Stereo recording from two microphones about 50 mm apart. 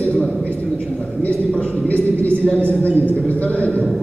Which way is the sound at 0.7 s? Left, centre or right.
Centre.